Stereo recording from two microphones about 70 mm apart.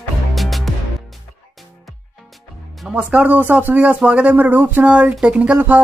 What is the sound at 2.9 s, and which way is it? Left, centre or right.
Speech, right.